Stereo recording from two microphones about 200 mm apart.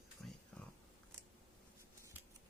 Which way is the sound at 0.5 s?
5° left (ahead or behind).